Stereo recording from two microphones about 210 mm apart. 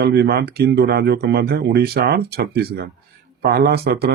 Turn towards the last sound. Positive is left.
turn(degrees=-50)  # may be behind; listen again after turning